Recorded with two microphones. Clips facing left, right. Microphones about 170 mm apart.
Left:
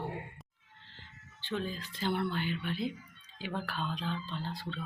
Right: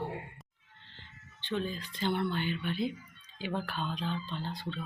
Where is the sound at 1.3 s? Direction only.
5° left (ahead or behind).